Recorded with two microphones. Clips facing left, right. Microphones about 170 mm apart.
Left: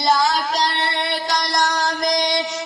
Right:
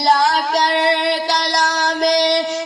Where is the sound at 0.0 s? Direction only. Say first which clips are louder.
Right 3 dB; 60° right (ahead or behind).